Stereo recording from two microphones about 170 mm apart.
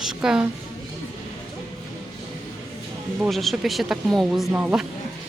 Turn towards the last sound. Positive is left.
turn(degrees=-10)  # may be behind; listen again after turning